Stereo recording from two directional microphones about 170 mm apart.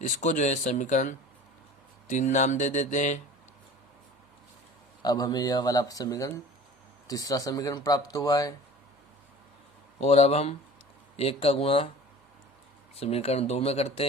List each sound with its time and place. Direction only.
0.0 s speech: 45° left (ahead or behind)
5.0 s speech: 20° left (ahead or behind)
10.0 s speech: 35° left (ahead or behind)
13.0 s speech: 35° left (ahead or behind)